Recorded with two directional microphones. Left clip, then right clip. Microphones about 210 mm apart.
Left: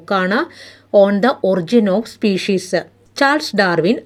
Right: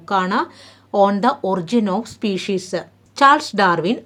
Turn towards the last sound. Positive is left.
turn(degrees=15)  # may be behind; listen again after turning